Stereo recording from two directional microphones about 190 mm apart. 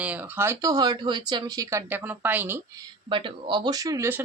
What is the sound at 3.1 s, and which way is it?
Speech, 25° right (ahead or behind).